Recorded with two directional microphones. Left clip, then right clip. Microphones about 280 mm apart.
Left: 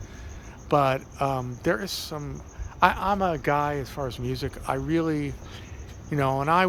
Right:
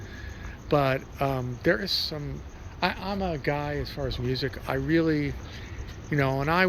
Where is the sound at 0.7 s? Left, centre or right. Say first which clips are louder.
Left 2 dB; centre.